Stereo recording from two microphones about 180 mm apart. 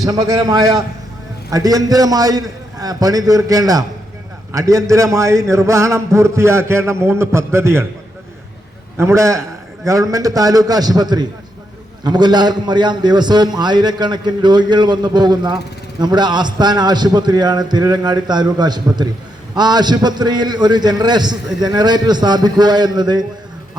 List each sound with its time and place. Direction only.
0.0 s a man's voice: 20° right (ahead or behind)
9.0 s a man's voice: 15° right (ahead or behind)